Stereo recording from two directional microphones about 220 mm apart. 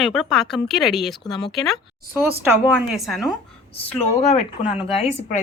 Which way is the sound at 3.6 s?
25° left (ahead or behind).